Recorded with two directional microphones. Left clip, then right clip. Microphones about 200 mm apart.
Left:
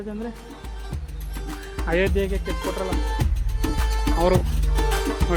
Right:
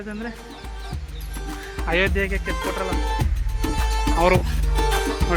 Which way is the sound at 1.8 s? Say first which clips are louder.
Right 1 dB; 20° left (ahead or behind).